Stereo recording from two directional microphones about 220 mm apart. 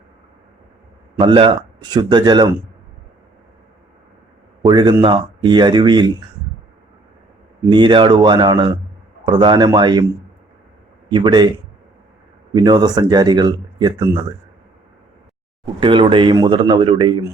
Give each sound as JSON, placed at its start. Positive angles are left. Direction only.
{"t": 1.2, "sound": "speech", "side_deg": -20}
{"t": 4.6, "sound": "speech", "side_deg": -20}
{"t": 7.7, "sound": "speech", "side_deg": -20}
{"t": 11.1, "sound": "speech", "side_deg": -20}
{"t": 12.5, "sound": "speech", "side_deg": -20}
{"t": 15.6, "sound": "speech", "side_deg": -20}